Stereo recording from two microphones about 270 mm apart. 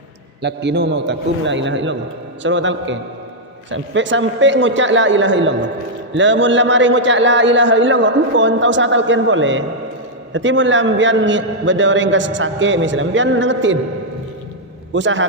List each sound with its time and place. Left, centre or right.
0.4 s a man's voice: right
14.9 s a man's voice: right